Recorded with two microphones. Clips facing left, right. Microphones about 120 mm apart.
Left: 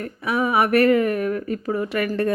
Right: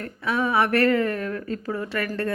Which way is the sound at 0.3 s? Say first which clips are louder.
Left 2 dB; 10° left (ahead or behind).